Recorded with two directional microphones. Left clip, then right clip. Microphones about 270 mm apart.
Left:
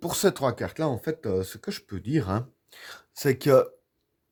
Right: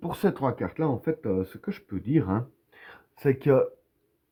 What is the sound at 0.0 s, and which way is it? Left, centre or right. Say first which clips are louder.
Speech: left 3 dB; left.